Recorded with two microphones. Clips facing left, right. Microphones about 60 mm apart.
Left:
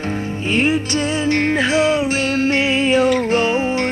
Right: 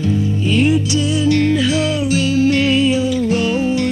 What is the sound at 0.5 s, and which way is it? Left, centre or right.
Music, left.